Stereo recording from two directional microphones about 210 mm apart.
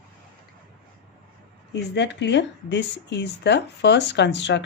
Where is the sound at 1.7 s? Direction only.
55° left (ahead or behind).